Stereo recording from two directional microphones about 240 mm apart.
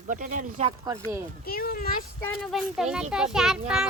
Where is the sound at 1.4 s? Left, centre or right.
Left.